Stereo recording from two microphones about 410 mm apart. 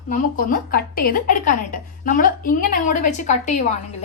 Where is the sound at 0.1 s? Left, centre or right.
Centre.